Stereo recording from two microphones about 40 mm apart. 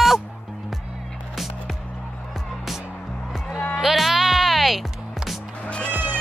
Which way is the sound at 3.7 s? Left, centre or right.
Centre.